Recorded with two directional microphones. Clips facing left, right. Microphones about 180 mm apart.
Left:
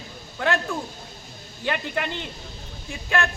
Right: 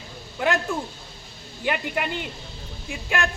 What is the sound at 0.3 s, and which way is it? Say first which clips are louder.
Speech: right 1 dB; 15° right (ahead or behind).